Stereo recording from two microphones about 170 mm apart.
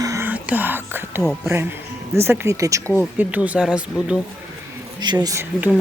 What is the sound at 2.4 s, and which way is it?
Speech, 20° right (ahead or behind).